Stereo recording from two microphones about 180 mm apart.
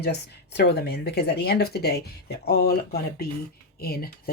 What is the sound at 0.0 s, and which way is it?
Speech, 65° left (ahead or behind).